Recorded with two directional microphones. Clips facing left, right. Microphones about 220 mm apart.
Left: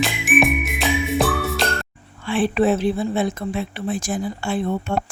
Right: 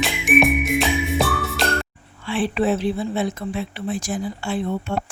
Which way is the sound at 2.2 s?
50° left (ahead or behind).